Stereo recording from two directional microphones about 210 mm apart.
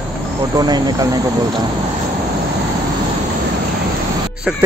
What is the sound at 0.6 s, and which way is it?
Speech, 20° right (ahead or behind).